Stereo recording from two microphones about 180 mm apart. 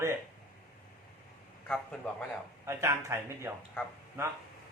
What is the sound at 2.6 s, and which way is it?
Speech, 15° right (ahead or behind).